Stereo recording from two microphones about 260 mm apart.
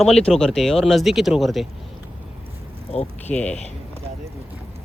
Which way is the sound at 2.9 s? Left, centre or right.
Left.